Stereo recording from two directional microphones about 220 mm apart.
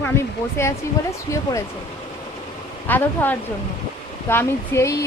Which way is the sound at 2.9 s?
10° left (ahead or behind).